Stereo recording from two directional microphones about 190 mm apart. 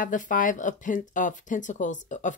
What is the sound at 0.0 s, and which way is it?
Speech, 45° left (ahead or behind).